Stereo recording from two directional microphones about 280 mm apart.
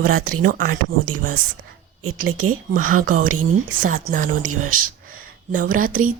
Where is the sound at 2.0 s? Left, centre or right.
Right.